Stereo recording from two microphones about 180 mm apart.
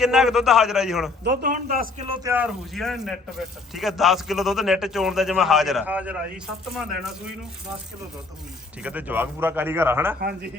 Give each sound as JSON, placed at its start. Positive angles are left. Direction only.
{"t": 0.0, "sound": "a man's voice", "side_deg": 0}
{"t": 1.2, "sound": "a man's voice", "side_deg": -50}
{"t": 2.2, "sound": "a man's voice", "side_deg": -10}
{"t": 8.8, "sound": "a man's voice", "side_deg": -10}